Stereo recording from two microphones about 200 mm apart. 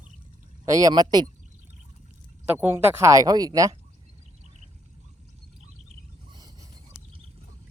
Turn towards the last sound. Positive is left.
turn(degrees=-20)  # may be behind; listen again after turning